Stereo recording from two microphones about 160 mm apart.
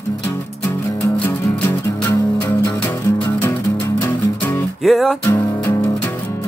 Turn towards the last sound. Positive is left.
turn(degrees=15)  # may be behind; listen again after turning